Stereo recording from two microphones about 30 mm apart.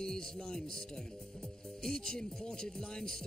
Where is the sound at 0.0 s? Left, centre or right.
Centre.